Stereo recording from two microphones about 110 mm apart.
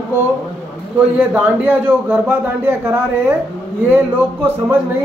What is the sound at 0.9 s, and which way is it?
A man's voice, 15° right (ahead or behind).